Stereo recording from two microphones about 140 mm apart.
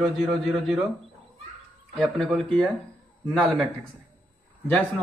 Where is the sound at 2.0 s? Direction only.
5° left (ahead or behind).